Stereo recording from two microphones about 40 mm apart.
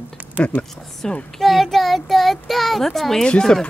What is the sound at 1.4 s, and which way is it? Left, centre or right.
A child's voice, centre.